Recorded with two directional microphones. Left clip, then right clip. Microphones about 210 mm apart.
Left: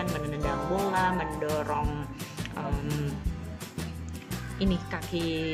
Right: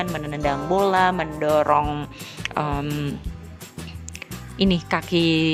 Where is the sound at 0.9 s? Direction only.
45° right (ahead or behind).